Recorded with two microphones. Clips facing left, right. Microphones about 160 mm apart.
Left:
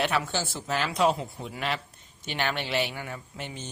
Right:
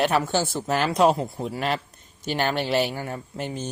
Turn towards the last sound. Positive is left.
turn(degrees=-40)  # may be behind; listen again after turning